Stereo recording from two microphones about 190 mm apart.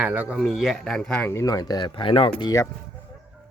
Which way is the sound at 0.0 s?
10° right (ahead or behind).